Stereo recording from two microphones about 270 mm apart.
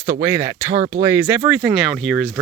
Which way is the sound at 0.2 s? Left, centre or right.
Centre.